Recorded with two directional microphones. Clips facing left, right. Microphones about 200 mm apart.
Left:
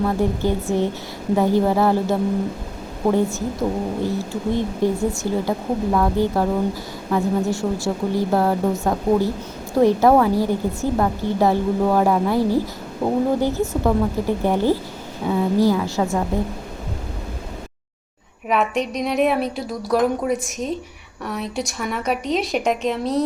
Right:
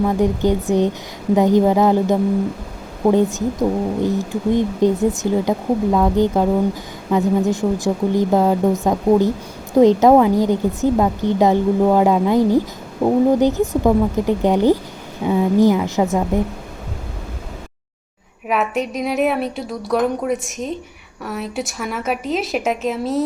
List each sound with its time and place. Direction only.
0.0 s speech: 15° right (ahead or behind)
18.4 s a woman's voice: 5° right (ahead or behind)